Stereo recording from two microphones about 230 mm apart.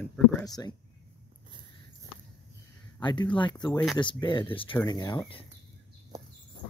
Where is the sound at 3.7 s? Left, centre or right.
Centre.